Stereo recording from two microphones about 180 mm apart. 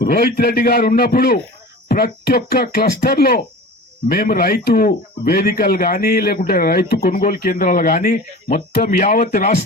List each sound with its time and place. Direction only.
0.0 s speech: 55° left (ahead or behind)